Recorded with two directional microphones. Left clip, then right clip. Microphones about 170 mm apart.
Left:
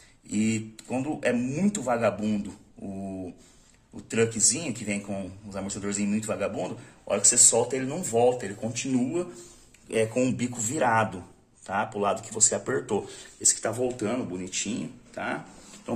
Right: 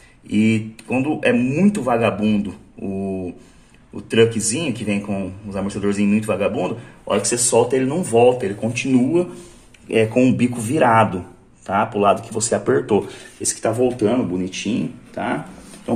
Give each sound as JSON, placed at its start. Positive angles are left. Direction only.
{"t": 0.8, "sound": "speech", "side_deg": -15}
{"t": 3.9, "sound": "speech", "side_deg": -20}